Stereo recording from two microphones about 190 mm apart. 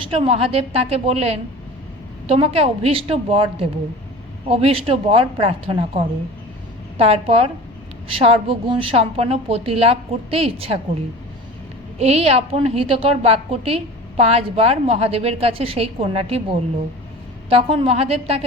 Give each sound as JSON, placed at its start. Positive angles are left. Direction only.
{"t": 0.0, "sound": "a woman's voice", "side_deg": -30}
{"t": 11.9, "sound": "a woman's voice", "side_deg": -35}